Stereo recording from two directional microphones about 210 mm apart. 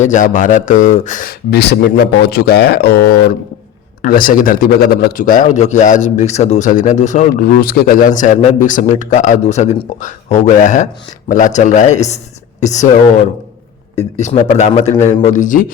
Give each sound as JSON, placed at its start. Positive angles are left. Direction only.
{"t": 0.0, "sound": "a man's voice", "side_deg": 35}
{"t": 14.2, "sound": "a man's voice", "side_deg": 35}